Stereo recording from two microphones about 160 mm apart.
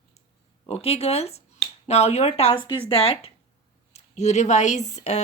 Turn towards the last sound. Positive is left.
turn(degrees=45)  # may be behind; listen again after turning